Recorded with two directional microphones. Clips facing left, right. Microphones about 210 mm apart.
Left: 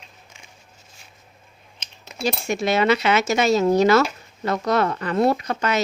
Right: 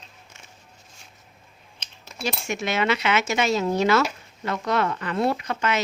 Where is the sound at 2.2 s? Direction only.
35° left (ahead or behind).